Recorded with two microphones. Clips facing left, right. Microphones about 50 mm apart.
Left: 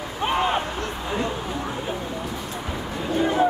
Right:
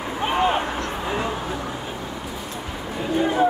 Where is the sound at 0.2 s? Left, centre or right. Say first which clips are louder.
Right 1 dB; centre.